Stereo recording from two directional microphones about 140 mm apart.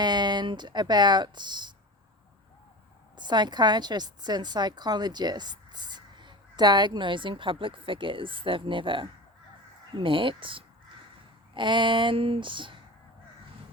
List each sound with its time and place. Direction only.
0.0 s speech: 30° right (ahead or behind)
3.2 s a woman's voice: 30° right (ahead or behind)